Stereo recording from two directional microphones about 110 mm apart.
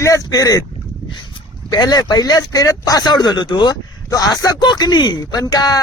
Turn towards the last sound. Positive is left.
turn(degrees=35)  # may be behind; listen again after turning